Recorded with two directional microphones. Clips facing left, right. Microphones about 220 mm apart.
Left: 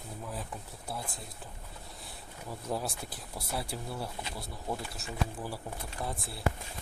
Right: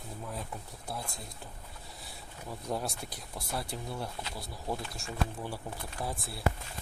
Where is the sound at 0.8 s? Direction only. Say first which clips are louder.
Even; 5° left (ahead or behind).